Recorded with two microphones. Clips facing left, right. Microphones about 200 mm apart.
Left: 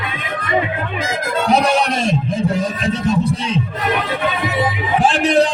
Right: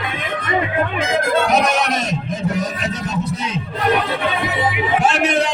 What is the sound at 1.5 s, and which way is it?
Music, 30° left (ahead or behind).